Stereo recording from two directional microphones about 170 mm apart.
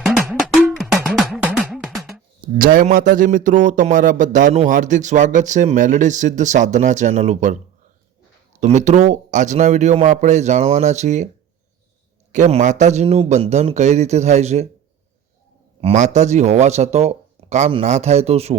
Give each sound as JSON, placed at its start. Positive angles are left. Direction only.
{"t": 0.3, "sound": "cowbell", "side_deg": 0}
{"t": 2.6, "sound": "a man's voice", "side_deg": -55}
{"t": 12.3, "sound": "speech", "side_deg": -45}
{"t": 15.8, "sound": "speech", "side_deg": -40}